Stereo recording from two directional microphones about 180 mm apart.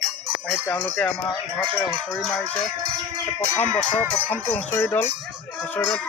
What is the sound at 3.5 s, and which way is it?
Speech, 5° left (ahead or behind).